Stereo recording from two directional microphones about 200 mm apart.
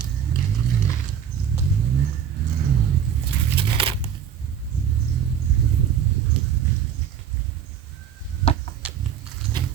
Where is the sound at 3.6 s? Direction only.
25° right (ahead or behind).